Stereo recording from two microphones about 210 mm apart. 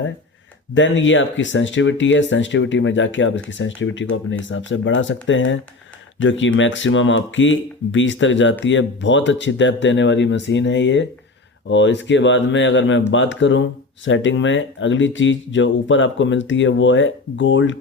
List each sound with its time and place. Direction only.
0.7 s speech: 60° left (ahead or behind)